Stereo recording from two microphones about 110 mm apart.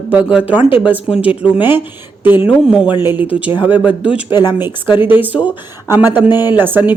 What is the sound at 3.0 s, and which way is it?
Speech, 15° right (ahead or behind).